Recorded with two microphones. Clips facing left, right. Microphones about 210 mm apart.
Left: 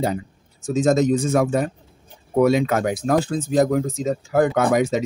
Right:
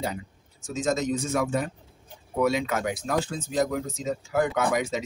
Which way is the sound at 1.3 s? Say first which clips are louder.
Left 7 dB; 50° left (ahead or behind).